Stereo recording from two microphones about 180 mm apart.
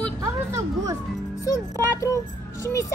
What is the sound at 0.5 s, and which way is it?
Music, 20° right (ahead or behind).